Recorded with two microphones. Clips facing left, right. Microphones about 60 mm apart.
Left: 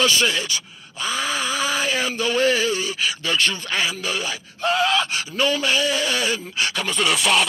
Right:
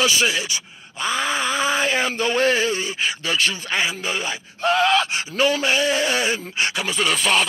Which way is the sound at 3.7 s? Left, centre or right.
Right.